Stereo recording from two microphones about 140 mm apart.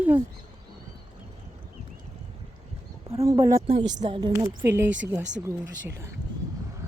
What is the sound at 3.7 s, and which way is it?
Speech, 45° right (ahead or behind).